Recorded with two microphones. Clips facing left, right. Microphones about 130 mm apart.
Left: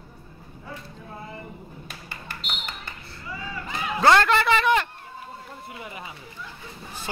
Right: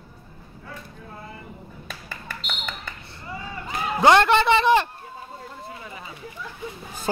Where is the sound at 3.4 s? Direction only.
20° right (ahead or behind).